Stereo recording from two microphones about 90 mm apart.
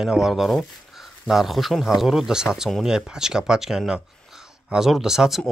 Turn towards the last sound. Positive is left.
turn(degrees=-5)  # may be behind; listen again after turning